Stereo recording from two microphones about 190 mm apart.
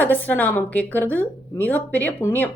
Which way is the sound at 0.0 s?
10° left (ahead or behind).